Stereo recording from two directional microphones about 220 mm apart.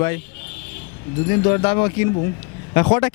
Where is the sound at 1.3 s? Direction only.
20° left (ahead or behind).